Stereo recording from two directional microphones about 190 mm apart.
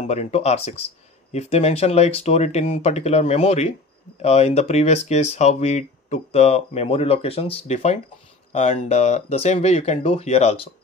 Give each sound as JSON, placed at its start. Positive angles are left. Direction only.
{"t": 0.0, "sound": "speech", "side_deg": 35}